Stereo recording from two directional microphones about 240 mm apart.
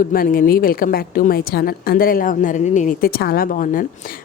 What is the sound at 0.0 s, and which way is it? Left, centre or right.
A woman's voice, left.